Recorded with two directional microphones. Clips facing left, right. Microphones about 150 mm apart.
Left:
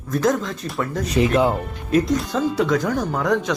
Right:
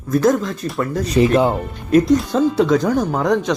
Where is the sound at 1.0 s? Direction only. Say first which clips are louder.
Right 3 dB; 30° right (ahead or behind).